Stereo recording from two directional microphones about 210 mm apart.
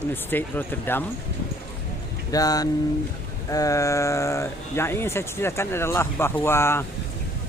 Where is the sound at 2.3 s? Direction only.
15° left (ahead or behind).